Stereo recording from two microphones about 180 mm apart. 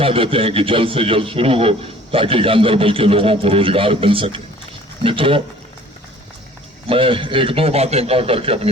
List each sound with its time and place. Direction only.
0.0 s a man's voice: 30° right (ahead or behind)
6.8 s a man's voice: 30° right (ahead or behind)